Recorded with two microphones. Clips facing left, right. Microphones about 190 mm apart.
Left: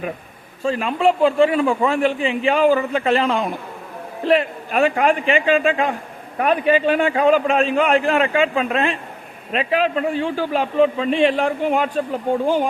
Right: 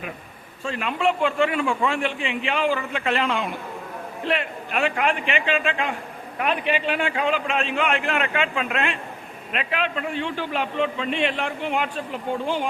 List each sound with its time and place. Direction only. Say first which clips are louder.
0.6 s a man's voice: left 6 dB; 35° left (ahead or behind)